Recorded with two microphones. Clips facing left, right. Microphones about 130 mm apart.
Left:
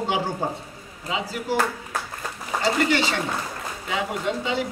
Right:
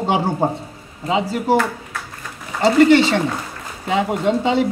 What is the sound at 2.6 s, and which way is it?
A woman's voice, 25° right (ahead or behind).